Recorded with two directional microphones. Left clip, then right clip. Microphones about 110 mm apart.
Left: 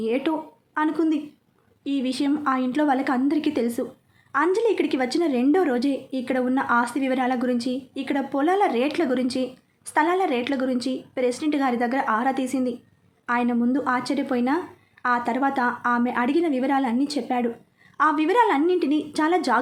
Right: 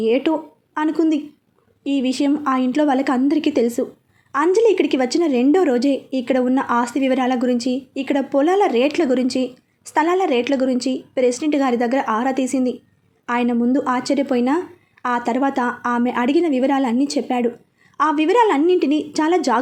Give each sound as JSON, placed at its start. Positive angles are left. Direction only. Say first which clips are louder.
{"t": 0.0, "sound": "a woman's voice", "louder": "right 6 dB", "side_deg": -35}